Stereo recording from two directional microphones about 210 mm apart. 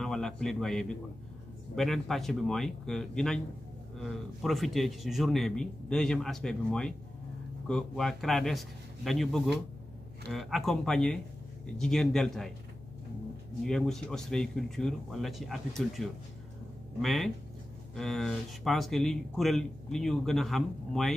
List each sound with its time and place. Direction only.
0.0 s a man's voice: centre (ahead or behind)
13.7 s a man's voice: 5° left (ahead or behind)